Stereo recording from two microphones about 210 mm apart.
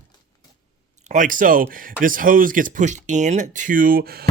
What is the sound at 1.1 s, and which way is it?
A man's voice, 40° right (ahead or behind).